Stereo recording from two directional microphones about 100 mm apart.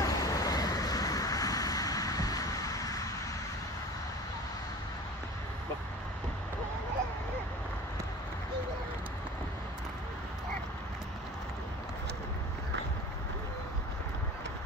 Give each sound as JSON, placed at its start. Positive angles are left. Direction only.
{"t": 0.0, "sound": "vehicle", "side_deg": 35}